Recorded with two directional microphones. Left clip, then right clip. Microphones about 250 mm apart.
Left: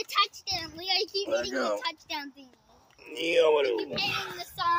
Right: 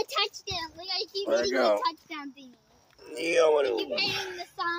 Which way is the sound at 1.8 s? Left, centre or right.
Left.